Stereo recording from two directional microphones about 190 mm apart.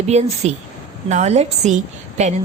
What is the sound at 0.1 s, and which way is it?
A woman's voice, 35° right (ahead or behind).